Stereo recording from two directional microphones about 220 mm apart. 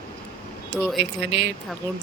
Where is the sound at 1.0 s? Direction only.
50° right (ahead or behind).